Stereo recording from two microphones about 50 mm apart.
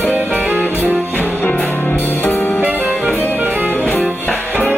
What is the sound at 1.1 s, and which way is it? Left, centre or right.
Music, left.